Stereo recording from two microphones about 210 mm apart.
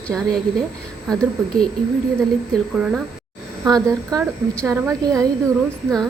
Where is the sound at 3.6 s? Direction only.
20° right (ahead or behind).